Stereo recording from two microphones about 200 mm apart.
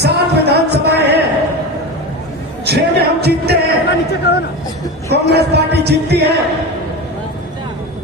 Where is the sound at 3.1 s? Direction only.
55° right (ahead or behind).